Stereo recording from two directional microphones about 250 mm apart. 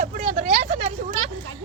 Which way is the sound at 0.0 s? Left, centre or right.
Right.